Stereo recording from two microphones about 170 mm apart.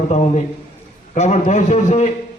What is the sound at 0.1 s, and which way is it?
A man's voice, 40° left (ahead or behind).